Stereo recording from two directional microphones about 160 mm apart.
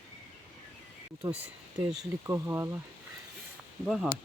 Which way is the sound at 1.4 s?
5° right (ahead or behind).